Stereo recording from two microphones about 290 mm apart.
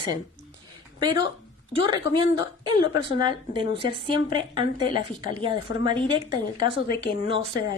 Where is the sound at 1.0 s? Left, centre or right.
Centre.